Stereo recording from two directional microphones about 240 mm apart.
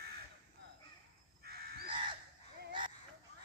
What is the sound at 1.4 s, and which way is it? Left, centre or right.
Crow, right.